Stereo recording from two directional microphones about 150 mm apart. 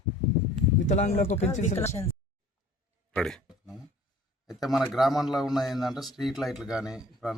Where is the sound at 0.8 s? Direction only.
55° left (ahead or behind).